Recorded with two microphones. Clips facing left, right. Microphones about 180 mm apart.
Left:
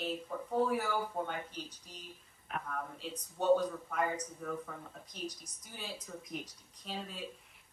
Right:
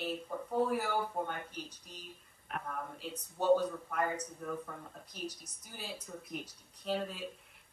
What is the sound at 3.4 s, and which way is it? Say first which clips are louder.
Speech: even; centre (ahead or behind).